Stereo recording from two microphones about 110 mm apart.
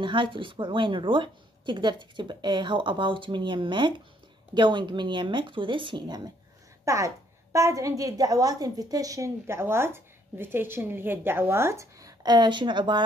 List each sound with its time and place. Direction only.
0.0 s a woman's voice: 50° right (ahead or behind)
6.8 s a sound: 30° right (ahead or behind)
7.5 s a woman's voice: 30° right (ahead or behind); by 13.0 s 45° right (ahead or behind)